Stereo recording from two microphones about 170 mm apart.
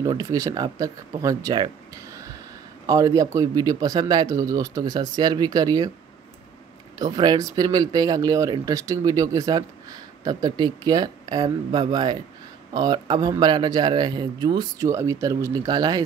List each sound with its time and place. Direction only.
0.0 s speech: 20° right (ahead or behind)
7.0 s speech: 25° right (ahead or behind)